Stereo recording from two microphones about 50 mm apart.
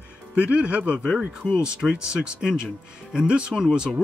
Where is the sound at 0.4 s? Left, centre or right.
Right.